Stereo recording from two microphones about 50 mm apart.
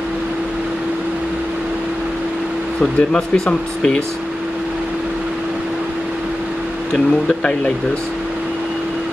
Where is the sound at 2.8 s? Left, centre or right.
Centre.